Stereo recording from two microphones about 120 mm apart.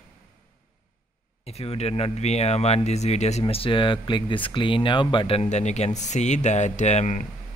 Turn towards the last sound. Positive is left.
turn(degrees=70)  # may be behind; listen again after turning